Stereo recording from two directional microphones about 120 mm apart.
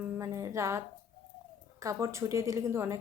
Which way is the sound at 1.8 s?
25° right (ahead or behind).